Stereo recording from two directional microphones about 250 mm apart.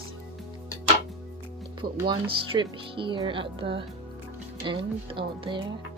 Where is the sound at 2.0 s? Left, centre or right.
Centre.